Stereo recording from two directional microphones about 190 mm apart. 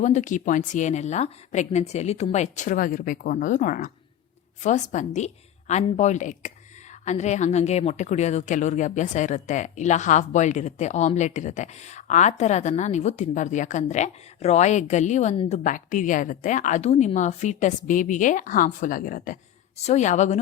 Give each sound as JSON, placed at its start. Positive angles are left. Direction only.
{"t": 0.0, "sound": "a woman's voice", "side_deg": 40}